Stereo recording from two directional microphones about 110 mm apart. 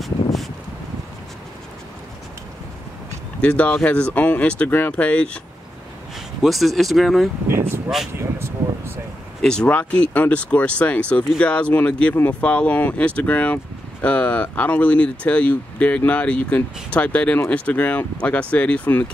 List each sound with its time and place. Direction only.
0.0 s a sound: centre (ahead or behind)
3.3 s speech: 15° left (ahead or behind)
6.4 s speech: centre (ahead or behind)
8.1 s speech: 25° right (ahead or behind)
9.4 s speech: 5° left (ahead or behind)